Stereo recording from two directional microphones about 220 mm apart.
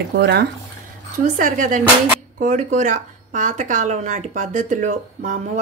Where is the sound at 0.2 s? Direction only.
45° right (ahead or behind).